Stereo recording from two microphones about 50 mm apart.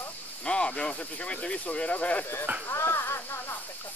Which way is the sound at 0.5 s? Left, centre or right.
Centre.